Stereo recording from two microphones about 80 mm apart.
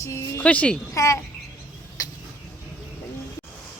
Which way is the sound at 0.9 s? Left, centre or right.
Left.